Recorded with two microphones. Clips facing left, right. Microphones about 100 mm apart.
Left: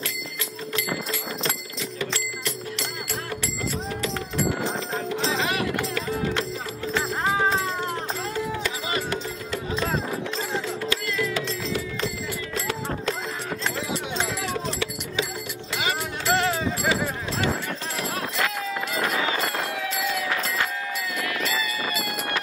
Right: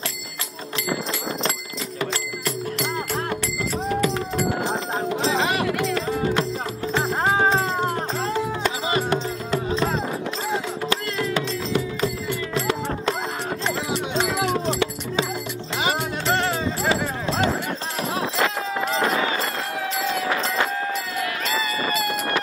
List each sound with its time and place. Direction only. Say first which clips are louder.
3.9 s music: right 6 dB; 45° right (ahead or behind)
4.9 s music: right 4 dB; 35° right (ahead or behind)
7.0 s music: right 4 dB; 40° right (ahead or behind)
10.9 s music: right 3 dB; 40° right (ahead or behind)
14.2 s music: right 6 dB; 65° right (ahead or behind)
16.3 s music: even; 5° left (ahead or behind)
16.9 s music: right 3 dB; 30° right (ahead or behind)
20.0 s music: right 3 dB; 45° right (ahead or behind)
21.2 s run: right 2 dB; 45° right (ahead or behind)